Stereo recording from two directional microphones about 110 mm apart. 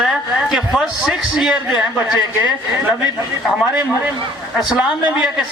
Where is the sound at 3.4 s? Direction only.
5° right (ahead or behind).